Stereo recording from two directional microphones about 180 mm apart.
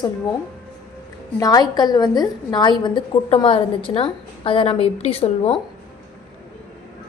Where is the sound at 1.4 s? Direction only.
20° left (ahead or behind).